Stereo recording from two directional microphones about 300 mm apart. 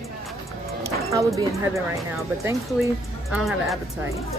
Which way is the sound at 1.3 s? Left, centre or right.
Centre.